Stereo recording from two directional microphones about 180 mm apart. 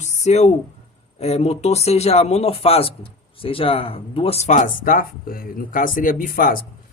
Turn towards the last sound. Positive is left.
turn(degrees=50)  # may be behind; listen again after turning